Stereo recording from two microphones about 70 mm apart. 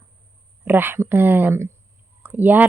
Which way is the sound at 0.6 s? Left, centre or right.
Right.